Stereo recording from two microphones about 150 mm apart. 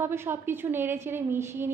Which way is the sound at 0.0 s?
15° right (ahead or behind).